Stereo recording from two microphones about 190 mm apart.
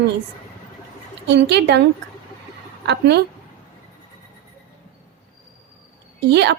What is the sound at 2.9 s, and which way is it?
Speech, 60° right (ahead or behind).